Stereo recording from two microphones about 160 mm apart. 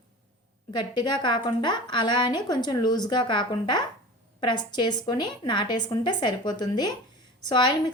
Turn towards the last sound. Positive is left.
turn(degrees=25)  # may be behind; listen again after turning